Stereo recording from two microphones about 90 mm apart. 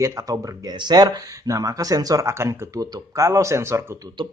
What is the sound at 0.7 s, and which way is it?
Speech, 50° right (ahead or behind).